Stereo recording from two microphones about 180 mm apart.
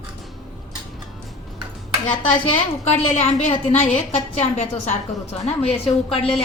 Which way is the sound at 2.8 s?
35° left (ahead or behind).